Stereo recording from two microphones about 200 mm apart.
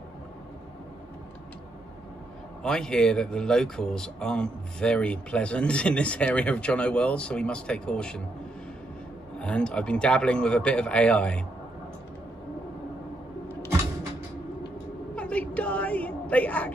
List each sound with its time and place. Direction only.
2.6 s speech: 5° left (ahead or behind)
9.4 s speech: 5° left (ahead or behind)
15.1 s a sound: 5° left (ahead or behind)